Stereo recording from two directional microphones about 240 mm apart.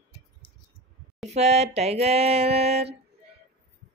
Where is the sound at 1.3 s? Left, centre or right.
Right.